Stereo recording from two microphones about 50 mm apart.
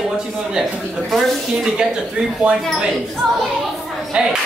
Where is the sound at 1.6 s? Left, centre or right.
Centre.